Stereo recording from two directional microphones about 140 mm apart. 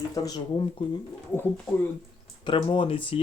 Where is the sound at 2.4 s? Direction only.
40° left (ahead or behind).